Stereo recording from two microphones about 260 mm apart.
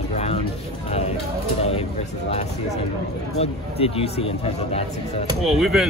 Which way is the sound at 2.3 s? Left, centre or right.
Left.